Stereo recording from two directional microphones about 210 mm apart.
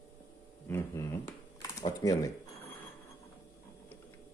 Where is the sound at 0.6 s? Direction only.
15° left (ahead or behind).